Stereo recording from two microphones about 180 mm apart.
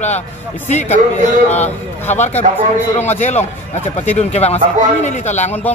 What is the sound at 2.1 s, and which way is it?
A man's voice, 40° left (ahead or behind).